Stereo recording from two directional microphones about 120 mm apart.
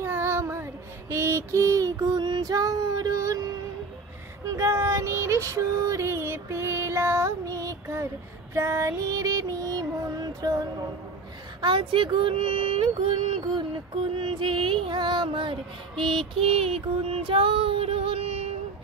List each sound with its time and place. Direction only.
0.0 s child singing: 20° right (ahead or behind)
4.6 s child singing: 25° right (ahead or behind)
8.5 s female singing: 25° right (ahead or behind)
11.6 s child singing: 45° right (ahead or behind)